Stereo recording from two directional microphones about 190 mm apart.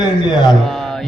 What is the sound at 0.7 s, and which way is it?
Speech, centre (ahead or behind).